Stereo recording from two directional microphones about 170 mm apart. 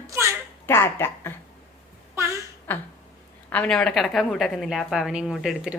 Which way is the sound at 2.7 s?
10° left (ahead or behind).